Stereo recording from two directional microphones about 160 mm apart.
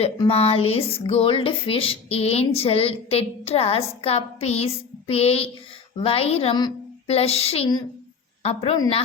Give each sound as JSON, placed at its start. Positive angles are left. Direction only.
{"t": 0.0, "sound": "speech", "side_deg": 40}
{"t": 7.1, "sound": "speech", "side_deg": 40}